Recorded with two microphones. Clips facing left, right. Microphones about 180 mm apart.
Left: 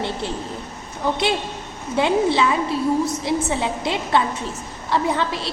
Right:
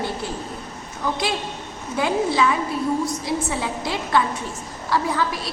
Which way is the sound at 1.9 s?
25° left (ahead or behind).